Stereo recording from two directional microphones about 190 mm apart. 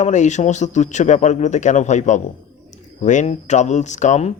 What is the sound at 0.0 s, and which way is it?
Speech, 40° left (ahead or behind).